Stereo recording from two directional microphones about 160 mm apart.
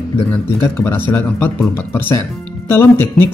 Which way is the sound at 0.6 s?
15° left (ahead or behind).